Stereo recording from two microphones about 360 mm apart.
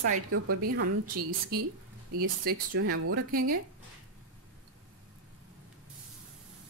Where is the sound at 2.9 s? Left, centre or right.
Right.